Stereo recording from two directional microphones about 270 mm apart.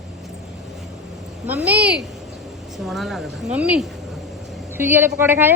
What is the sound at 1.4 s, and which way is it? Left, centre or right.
A woman's voice, centre.